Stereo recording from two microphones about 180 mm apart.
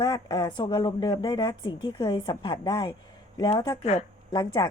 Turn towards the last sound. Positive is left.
turn(degrees=20)  # may be behind; listen again after turning